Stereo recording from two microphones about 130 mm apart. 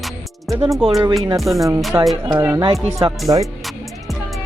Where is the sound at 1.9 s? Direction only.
15° right (ahead or behind).